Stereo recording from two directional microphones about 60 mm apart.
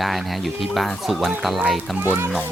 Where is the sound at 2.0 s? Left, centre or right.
Right.